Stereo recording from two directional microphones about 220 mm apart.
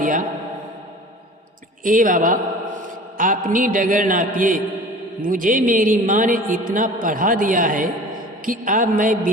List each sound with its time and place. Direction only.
0.0 s mantra: 35° right (ahead or behind)
1.8 s a man's voice: 40° right (ahead or behind)